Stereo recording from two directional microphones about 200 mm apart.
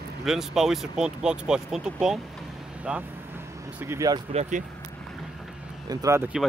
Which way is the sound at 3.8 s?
15° right (ahead or behind).